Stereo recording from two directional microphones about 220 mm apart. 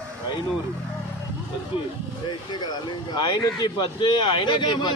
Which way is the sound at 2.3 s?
20° left (ahead or behind).